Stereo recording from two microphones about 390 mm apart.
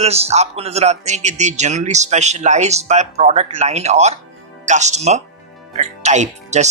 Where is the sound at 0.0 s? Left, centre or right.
Centre.